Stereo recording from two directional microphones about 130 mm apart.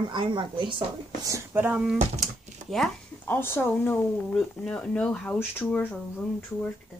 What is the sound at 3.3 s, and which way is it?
Speech, 15° left (ahead or behind).